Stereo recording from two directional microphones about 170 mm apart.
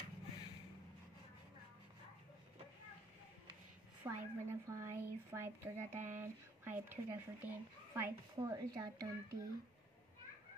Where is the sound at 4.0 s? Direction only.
15° right (ahead or behind).